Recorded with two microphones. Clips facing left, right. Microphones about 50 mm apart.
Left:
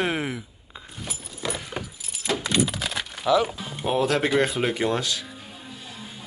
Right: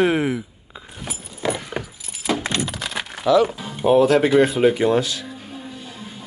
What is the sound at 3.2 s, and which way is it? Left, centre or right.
Speech, centre.